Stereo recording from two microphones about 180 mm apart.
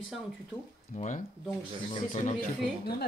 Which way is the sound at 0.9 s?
45° left (ahead or behind).